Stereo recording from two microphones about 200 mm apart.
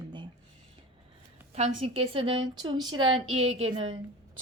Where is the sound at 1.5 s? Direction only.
30° right (ahead or behind).